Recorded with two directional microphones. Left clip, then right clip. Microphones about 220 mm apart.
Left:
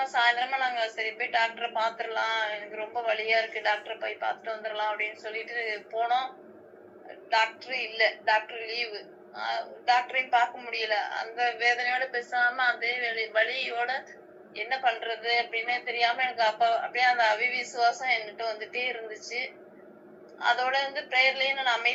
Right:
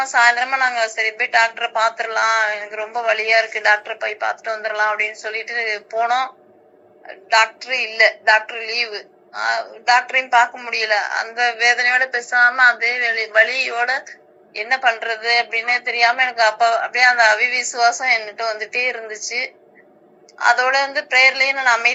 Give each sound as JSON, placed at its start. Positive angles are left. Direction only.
{"t": 0.0, "sound": "a woman's voice", "side_deg": -35}
{"t": 7.3, "sound": "a woman's voice", "side_deg": -35}